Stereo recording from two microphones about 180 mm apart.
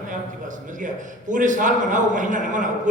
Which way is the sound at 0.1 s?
45° right (ahead or behind).